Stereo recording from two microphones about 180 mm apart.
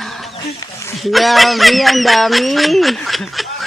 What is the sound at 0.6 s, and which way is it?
Speech, 15° left (ahead or behind).